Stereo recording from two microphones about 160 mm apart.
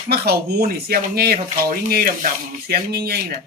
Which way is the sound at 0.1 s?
75° right (ahead or behind).